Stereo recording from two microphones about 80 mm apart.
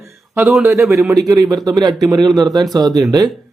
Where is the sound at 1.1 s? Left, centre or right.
Right.